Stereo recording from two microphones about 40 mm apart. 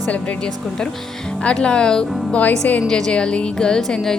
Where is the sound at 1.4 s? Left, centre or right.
Left.